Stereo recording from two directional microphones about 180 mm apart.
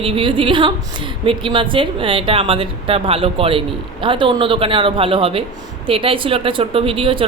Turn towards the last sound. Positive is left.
turn(degrees=-30)  # may be behind; listen again after turning